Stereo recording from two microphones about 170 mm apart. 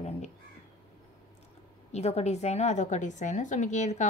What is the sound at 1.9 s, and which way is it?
A woman's voice, 40° left (ahead or behind).